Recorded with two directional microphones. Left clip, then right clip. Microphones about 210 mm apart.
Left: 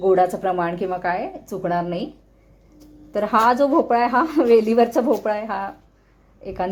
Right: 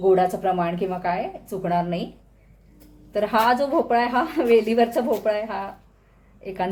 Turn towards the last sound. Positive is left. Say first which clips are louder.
# left 1 dB
turn(degrees=20)  # may be behind; listen again after turning